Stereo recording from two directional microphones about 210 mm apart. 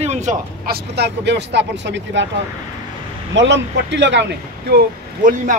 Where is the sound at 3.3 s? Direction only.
60° right (ahead or behind).